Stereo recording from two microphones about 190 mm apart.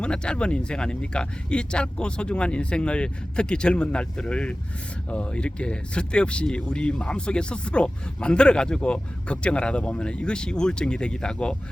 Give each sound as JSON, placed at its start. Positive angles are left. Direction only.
{"t": 0.0, "sound": "speech", "side_deg": 5}